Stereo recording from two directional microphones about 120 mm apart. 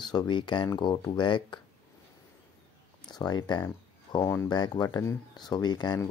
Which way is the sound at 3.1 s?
35° left (ahead or behind).